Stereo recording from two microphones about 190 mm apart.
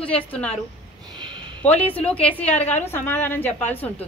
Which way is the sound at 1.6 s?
10° left (ahead or behind).